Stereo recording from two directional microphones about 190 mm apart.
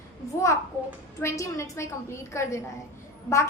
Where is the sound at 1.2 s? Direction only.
15° left (ahead or behind).